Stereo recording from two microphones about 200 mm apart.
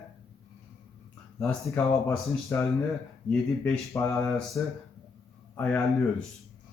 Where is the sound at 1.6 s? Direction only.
15° left (ahead or behind).